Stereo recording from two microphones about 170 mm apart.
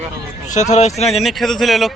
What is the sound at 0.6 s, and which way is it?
Speech, 40° left (ahead or behind).